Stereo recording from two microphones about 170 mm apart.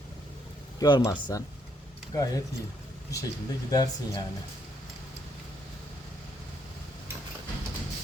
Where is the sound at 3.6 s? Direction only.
20° left (ahead or behind).